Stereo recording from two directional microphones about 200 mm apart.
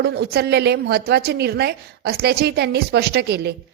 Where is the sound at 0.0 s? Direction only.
55° right (ahead or behind).